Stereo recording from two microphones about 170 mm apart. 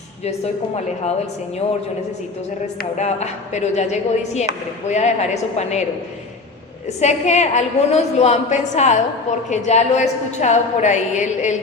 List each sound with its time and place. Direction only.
3.0 s speech: 40° left (ahead or behind)
7.0 s a woman's voice: 40° left (ahead or behind)